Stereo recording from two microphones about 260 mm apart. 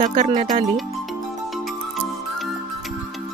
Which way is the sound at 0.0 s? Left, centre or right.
Right.